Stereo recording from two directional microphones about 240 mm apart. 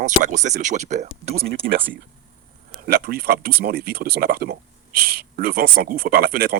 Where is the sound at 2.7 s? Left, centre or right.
Right.